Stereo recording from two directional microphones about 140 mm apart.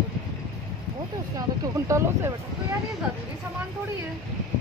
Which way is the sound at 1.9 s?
20° right (ahead or behind).